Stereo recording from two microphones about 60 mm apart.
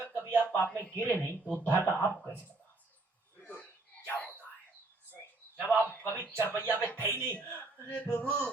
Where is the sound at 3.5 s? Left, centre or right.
Left.